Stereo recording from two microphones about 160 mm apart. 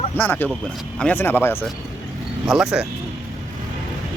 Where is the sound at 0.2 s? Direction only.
10° left (ahead or behind).